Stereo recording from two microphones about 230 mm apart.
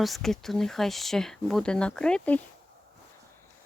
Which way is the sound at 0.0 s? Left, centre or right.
Centre.